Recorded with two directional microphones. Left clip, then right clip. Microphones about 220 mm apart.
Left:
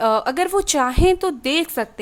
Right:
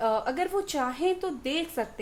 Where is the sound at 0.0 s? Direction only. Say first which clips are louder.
Left 8 dB; 45° left (ahead or behind).